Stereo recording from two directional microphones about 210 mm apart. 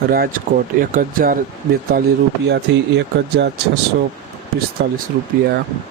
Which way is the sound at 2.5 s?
55° right (ahead or behind).